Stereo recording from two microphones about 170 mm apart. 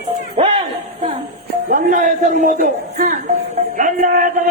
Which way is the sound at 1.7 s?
50° right (ahead or behind).